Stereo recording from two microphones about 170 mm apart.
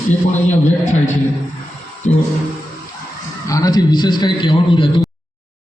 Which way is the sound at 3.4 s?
20° left (ahead or behind).